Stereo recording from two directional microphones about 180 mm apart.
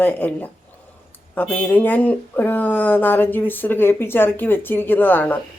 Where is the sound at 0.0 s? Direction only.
10° left (ahead or behind).